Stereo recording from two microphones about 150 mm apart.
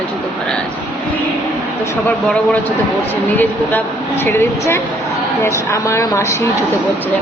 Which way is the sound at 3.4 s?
15° left (ahead or behind).